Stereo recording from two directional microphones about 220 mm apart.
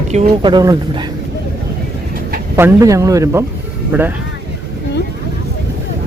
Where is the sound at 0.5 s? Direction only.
15° right (ahead or behind).